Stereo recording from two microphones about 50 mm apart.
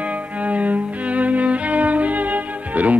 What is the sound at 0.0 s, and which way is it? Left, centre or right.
Music, right.